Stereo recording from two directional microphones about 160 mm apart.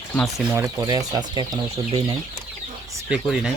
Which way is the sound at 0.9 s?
25° right (ahead or behind).